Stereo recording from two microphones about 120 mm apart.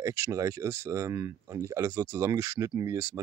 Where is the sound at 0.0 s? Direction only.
25° right (ahead or behind).